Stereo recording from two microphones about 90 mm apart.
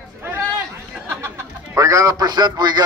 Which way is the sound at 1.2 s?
35° right (ahead or behind).